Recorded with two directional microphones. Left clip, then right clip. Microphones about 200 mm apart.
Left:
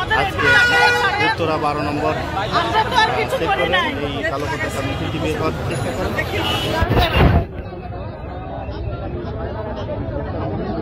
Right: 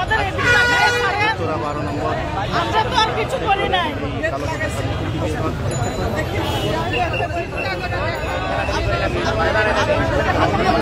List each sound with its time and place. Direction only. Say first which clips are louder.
0.1 s vehicle: left 3 dB; 15° right (ahead or behind)
2.5 s chatter: left 1 dB; 20° right (ahead or behind)